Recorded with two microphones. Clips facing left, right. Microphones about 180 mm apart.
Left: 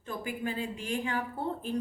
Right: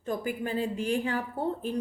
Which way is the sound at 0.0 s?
40° right (ahead or behind).